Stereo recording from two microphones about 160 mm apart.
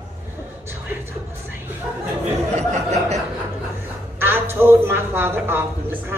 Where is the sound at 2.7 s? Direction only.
45° right (ahead or behind).